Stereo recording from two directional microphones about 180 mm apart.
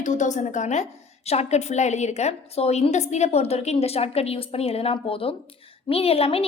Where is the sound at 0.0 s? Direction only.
45° left (ahead or behind).